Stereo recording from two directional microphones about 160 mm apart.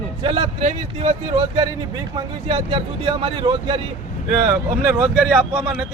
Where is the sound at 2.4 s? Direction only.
30° right (ahead or behind).